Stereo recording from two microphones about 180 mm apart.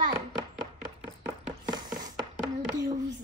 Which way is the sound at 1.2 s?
25° right (ahead or behind).